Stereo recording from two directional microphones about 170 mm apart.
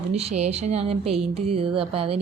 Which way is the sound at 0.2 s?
40° right (ahead or behind).